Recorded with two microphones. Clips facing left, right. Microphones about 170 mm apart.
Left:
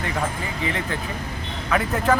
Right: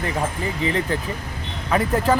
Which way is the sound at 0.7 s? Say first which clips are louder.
Right 4 dB; 35° right (ahead or behind).